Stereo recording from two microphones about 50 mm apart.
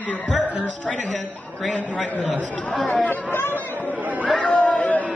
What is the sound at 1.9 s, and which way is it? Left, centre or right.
Speech, left.